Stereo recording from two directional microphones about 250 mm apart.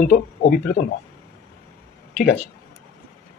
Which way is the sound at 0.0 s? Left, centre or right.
Left.